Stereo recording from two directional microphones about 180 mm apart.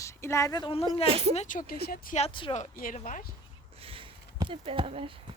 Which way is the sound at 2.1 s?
30° left (ahead or behind).